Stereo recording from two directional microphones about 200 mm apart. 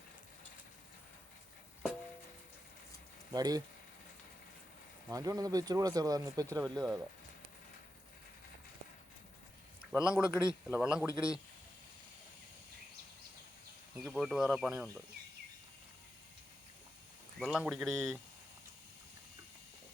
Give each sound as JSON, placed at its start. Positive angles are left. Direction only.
{"t": 3.3, "sound": "speech", "side_deg": -20}
{"t": 5.0, "sound": "speech", "side_deg": -20}
{"t": 9.9, "sound": "speech", "side_deg": -5}
{"t": 14.1, "sound": "speech", "side_deg": 0}
{"t": 17.4, "sound": "speech", "side_deg": 0}